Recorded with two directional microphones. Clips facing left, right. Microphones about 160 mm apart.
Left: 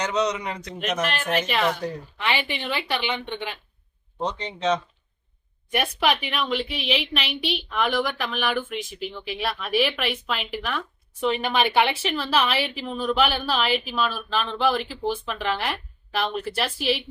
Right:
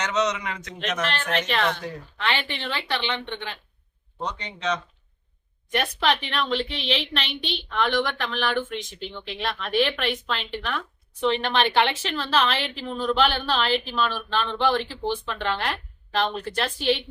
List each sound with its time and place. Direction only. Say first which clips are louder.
0.0 s a man's voice: left 1 dB; 35° left (ahead or behind)
1.0 s a woman's voice: even; 10° left (ahead or behind)
4.2 s speech: left 4 dB; 30° left (ahead or behind)
5.7 s a woman's voice: left 1 dB; 10° left (ahead or behind)